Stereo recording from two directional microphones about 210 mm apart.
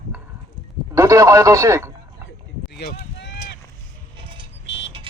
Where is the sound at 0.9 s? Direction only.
15° right (ahead or behind).